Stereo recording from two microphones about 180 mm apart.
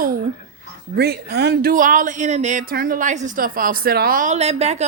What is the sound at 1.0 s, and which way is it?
A woman's voice, 65° right (ahead or behind).